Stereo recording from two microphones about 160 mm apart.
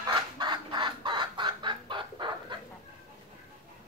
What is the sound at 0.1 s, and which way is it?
Chicken, 30° right (ahead or behind).